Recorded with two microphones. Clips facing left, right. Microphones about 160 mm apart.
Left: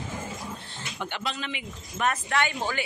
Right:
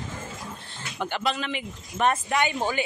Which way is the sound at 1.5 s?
40° right (ahead or behind).